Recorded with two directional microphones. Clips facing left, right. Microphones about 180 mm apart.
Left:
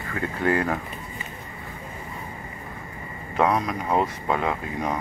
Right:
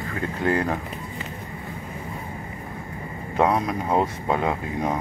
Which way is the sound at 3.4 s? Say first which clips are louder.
Right 1 dB; 25° right (ahead or behind).